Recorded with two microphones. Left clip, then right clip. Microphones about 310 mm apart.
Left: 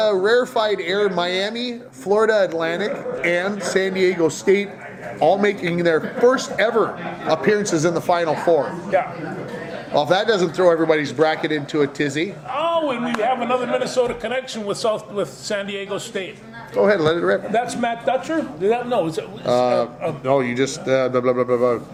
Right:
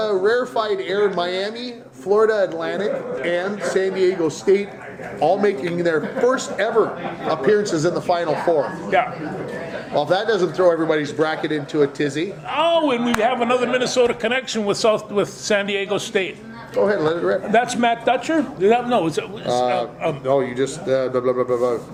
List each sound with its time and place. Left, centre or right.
0.0 s speech: left
9.9 s speech: left
12.5 s a man's voice: right
16.8 s speech: left
17.5 s a man's voice: right
19.5 s speech: left